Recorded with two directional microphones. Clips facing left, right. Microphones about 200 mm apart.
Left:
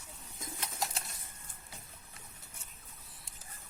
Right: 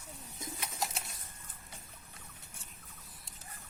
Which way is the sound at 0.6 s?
Centre (ahead or behind).